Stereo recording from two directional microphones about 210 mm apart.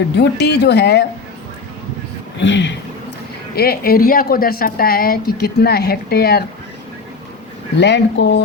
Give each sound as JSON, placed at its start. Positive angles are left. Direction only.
{"t": 0.2, "sound": "speech", "side_deg": 50}
{"t": 2.4, "sound": "speech", "side_deg": 60}
{"t": 3.5, "sound": "speech", "side_deg": 50}
{"t": 7.8, "sound": "speech", "side_deg": 55}